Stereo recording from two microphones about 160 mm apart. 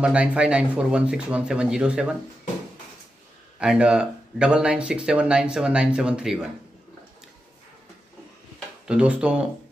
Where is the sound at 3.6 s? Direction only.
5° right (ahead or behind).